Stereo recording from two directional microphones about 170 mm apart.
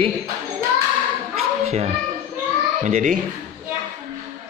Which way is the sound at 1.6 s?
40° right (ahead or behind).